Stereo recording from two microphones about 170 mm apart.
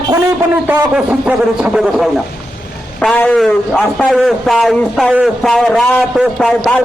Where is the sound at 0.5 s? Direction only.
5° right (ahead or behind).